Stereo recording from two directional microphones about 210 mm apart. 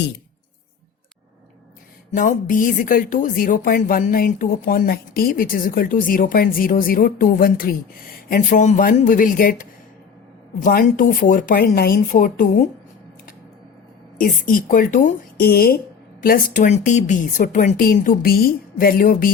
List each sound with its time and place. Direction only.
2.1 s speech: 40° left (ahead or behind)
14.2 s speech: 40° left (ahead or behind)